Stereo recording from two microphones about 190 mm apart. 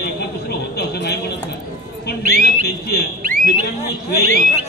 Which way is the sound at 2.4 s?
55° left (ahead or behind).